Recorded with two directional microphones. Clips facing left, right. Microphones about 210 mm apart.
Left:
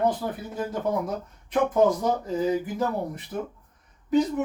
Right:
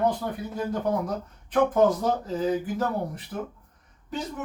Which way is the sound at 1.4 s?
10° left (ahead or behind).